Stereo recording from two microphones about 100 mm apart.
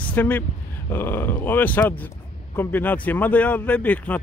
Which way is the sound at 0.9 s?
20° left (ahead or behind).